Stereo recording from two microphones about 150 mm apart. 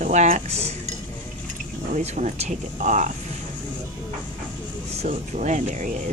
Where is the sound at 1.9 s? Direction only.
55° right (ahead or behind).